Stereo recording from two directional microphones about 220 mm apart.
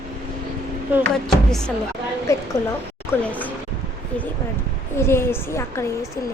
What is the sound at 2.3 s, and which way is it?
A woman's voice, 15° left (ahead or behind).